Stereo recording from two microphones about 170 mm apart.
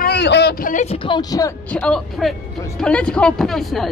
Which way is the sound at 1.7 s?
5° left (ahead or behind).